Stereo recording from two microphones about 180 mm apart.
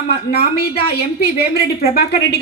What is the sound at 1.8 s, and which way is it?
Speech, 60° left (ahead or behind).